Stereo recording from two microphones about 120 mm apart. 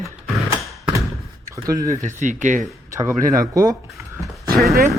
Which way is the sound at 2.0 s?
90° right.